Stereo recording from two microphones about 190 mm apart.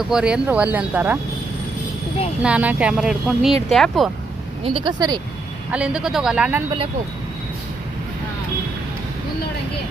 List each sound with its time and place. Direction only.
0.0 s speech: 5° right (ahead or behind)
2.4 s speech: 5° right (ahead or behind)
4.6 s speech: 25° right (ahead or behind)
5.7 s speech: 5° right (ahead or behind)